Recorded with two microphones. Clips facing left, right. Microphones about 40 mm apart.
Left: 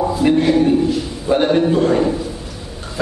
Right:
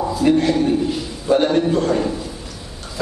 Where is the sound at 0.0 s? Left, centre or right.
Centre.